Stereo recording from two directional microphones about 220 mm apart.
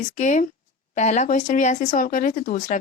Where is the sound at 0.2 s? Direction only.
35° left (ahead or behind).